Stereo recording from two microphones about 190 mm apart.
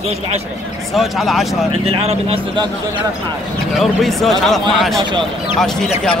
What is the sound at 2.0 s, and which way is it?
Speech, 30° right (ahead or behind).